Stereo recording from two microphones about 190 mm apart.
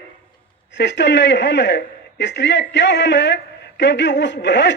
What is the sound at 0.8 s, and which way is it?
A man's voice, 65° left (ahead or behind).